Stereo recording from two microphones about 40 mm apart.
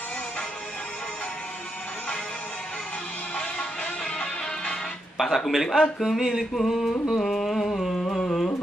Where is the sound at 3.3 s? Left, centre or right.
Left.